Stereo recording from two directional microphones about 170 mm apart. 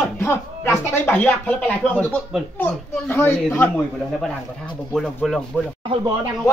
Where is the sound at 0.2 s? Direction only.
15° left (ahead or behind).